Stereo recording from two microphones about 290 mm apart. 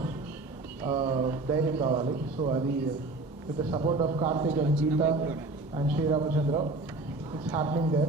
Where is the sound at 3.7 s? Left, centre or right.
Centre.